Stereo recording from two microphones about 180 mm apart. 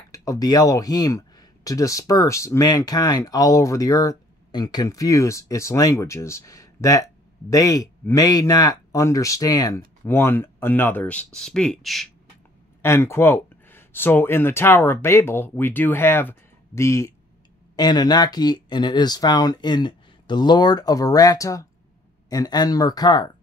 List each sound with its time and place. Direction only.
0.1 s speech: 20° left (ahead or behind); by 12.1 s centre (ahead or behind)
12.8 s speech: 15° left (ahead or behind)